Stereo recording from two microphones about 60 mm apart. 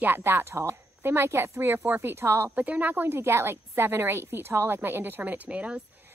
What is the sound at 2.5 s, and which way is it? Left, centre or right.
Speech, right.